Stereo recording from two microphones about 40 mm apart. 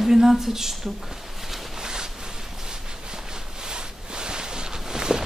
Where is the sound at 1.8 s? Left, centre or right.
Centre.